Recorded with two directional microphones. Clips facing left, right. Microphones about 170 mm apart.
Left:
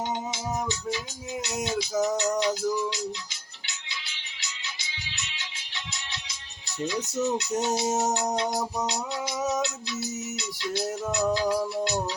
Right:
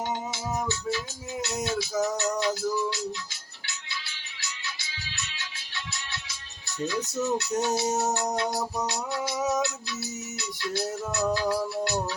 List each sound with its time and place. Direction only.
0.7 s music: 20° left (ahead or behind)